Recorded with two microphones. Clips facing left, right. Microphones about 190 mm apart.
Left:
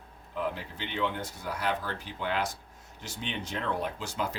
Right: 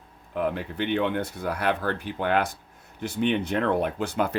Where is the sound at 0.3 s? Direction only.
60° right (ahead or behind).